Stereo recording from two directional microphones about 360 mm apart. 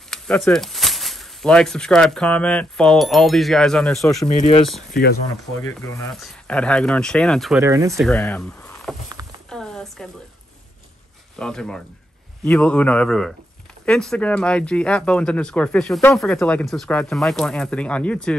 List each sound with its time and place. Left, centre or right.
0.1 s speech: centre
4.9 s speech: left
5.6 s speech: centre
8.1 s speech: centre
9.5 s a sound: centre
11.3 s speech: centre